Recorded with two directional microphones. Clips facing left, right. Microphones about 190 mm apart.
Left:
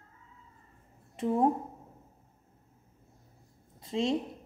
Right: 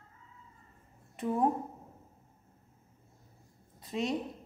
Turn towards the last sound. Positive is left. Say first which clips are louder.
# left 4 dB
turn(degrees=25)  # may be behind; listen again after turning